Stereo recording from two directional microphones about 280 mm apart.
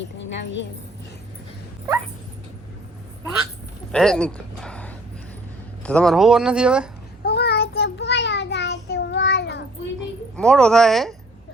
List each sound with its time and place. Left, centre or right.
0.0 s a woman's voice: left
3.9 s speech: centre
7.3 s child singing: left
10.3 s speech: centre